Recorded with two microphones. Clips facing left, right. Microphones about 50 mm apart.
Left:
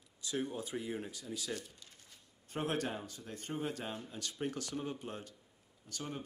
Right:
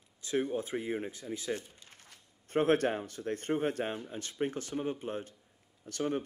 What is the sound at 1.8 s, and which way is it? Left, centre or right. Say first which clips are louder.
Speech: right 4 dB; right.